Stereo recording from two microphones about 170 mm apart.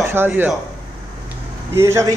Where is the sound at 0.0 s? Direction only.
15° right (ahead or behind).